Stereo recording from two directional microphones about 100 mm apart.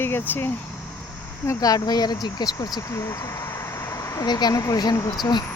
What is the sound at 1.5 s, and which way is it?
Speech, 40° left (ahead or behind).